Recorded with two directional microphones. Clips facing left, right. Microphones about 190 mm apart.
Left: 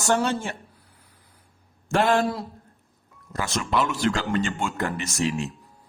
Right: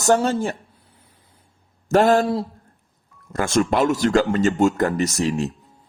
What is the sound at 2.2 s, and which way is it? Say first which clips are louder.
Speech: right 4 dB; 25° right (ahead or behind).